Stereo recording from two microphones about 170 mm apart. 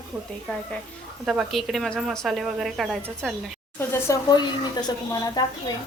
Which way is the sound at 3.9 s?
20° left (ahead or behind).